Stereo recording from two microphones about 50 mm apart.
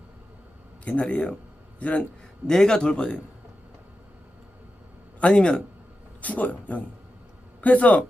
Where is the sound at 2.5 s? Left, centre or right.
Centre.